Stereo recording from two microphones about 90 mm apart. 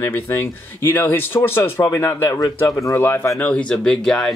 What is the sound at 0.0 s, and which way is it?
Speech, 25° left (ahead or behind).